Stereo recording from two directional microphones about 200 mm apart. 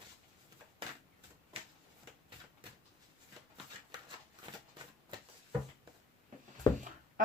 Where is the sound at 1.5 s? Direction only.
30° right (ahead or behind).